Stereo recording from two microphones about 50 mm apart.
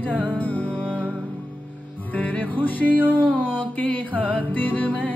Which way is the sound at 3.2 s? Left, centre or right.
Right.